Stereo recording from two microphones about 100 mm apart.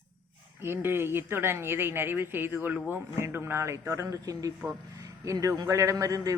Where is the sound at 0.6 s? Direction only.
25° right (ahead or behind).